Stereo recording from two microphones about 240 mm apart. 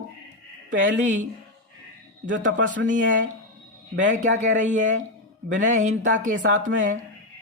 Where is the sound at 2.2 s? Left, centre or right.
Right.